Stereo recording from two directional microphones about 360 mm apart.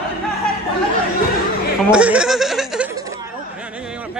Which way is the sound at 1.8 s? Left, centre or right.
Centre.